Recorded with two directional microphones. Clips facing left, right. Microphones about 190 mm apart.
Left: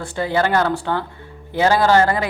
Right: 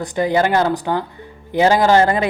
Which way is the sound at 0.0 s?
15° right (ahead or behind).